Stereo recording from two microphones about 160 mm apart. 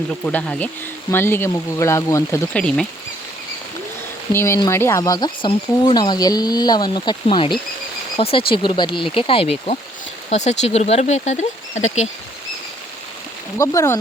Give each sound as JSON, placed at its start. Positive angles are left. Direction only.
{"t": 0.3, "sound": "speech", "side_deg": 10}
{"t": 2.5, "sound": "speech", "side_deg": 5}
{"t": 4.3, "sound": "speech", "side_deg": 15}
{"t": 13.6, "sound": "speech", "side_deg": 20}